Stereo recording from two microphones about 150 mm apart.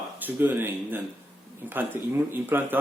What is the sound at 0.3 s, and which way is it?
Speech, 10° right (ahead or behind).